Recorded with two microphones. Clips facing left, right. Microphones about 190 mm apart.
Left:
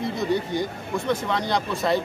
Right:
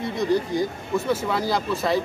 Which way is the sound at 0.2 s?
Centre (ahead or behind).